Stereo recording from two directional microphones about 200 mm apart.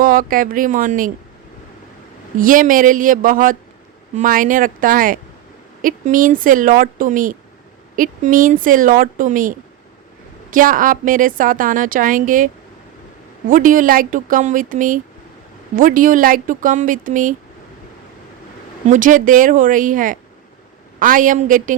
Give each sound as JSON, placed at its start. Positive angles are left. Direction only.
{"t": 0.0, "sound": "a woman's voice", "side_deg": -45}
{"t": 2.4, "sound": "a woman's voice", "side_deg": -40}
{"t": 13.5, "sound": "speech", "side_deg": -40}
{"t": 18.9, "sound": "speech", "side_deg": -40}